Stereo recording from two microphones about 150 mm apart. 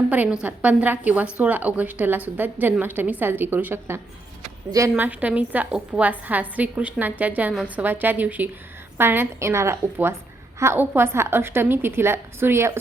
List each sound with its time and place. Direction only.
0.1 s a woman's voice: 10° right (ahead or behind)
5.0 s a woman's voice: 10° right (ahead or behind)